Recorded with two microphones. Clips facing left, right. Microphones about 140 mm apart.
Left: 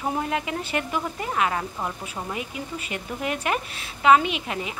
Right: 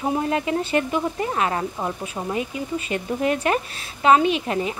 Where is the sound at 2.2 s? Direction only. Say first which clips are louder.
Right 4 dB; 5° right (ahead or behind).